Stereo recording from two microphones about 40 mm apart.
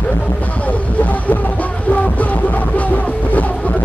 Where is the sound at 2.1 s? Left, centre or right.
Left.